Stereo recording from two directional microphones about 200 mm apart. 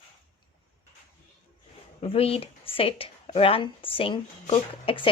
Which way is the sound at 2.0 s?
30° left (ahead or behind).